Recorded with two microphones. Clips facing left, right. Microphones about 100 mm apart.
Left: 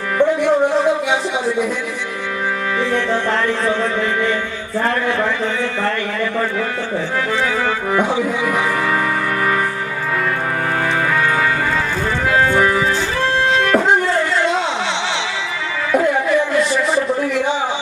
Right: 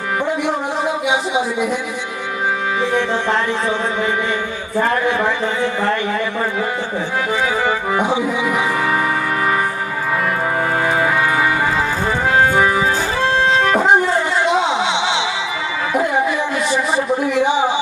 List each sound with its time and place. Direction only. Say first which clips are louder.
0.4 s speech: left 5 dB; 15° right (ahead or behind)
2.8 s speech: even; 20° right (ahead or behind)
5.6 s speech: right 2 dB; 20° right (ahead or behind)
7.3 s music: right 2 dB; 15° right (ahead or behind)
10.8 s music: even; 20° right (ahead or behind)
15.9 s a sound: left 3 dB; 20° right (ahead or behind)
17.4 s speech: right 3 dB; 15° right (ahead or behind)